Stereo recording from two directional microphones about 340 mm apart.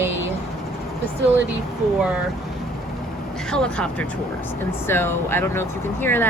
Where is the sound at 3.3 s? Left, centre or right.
Centre.